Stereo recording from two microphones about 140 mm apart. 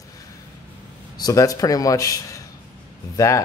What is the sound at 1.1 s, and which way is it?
A man's voice, 25° left (ahead or behind).